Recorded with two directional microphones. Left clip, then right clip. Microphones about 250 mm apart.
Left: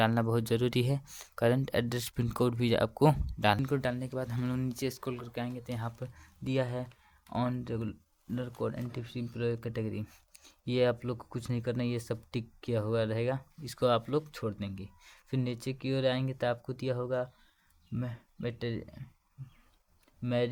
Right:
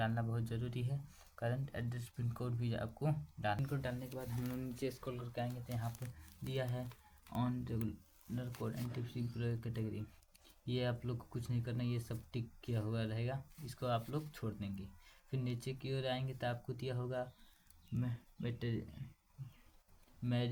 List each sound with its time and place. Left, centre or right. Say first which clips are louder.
0.0 s speech: left 12 dB; left
6.4 s speech: left 9 dB; left
20.2 s speech: left 10 dB; left